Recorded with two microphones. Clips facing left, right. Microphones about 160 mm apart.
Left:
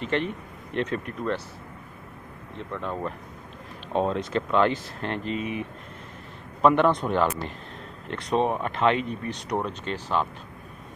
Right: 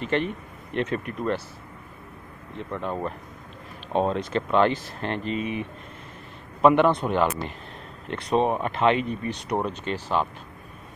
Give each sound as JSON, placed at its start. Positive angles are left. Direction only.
{"t": 0.0, "sound": "speech", "side_deg": -5}
{"t": 2.7, "sound": "speech", "side_deg": -15}
{"t": 4.1, "sound": "speech", "side_deg": 0}
{"t": 6.6, "sound": "speech", "side_deg": -10}